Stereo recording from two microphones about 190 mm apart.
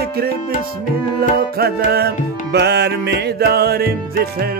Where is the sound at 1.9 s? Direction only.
55° right (ahead or behind).